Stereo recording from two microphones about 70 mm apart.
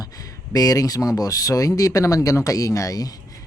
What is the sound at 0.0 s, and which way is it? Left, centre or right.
Speech, left.